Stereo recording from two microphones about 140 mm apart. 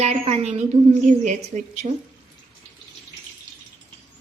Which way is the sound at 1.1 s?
60° right (ahead or behind).